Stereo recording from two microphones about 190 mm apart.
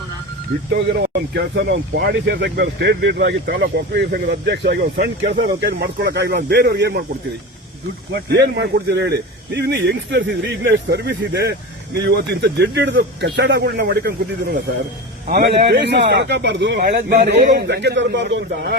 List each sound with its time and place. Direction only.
1.3 s speech: 55° right (ahead or behind)
4.8 s speech: 40° right (ahead or behind)
5.6 s speech: 55° right (ahead or behind)
8.1 s speech: 65° right (ahead or behind)